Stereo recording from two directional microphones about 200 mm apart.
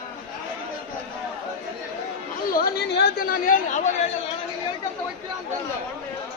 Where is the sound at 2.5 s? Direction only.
50° left (ahead or behind).